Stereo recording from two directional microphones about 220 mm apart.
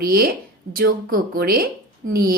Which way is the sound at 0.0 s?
40° right (ahead or behind).